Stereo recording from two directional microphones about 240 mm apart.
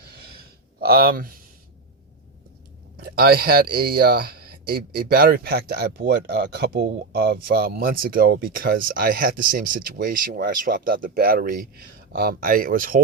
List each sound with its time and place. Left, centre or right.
0.0 s gasp: right
0.8 s speech: right
3.0 s speech: right